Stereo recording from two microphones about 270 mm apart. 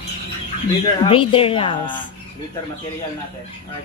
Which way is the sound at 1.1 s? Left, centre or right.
Centre.